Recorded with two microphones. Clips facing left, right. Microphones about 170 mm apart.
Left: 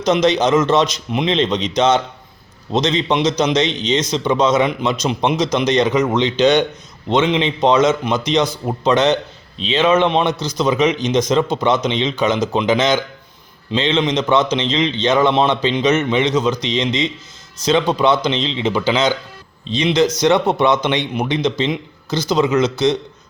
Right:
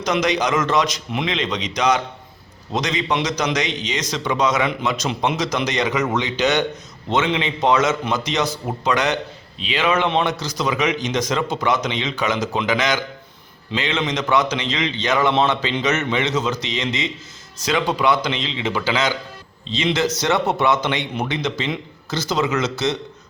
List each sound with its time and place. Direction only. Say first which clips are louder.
0.0 s a man's voice: left 5 dB; 25° left (ahead or behind)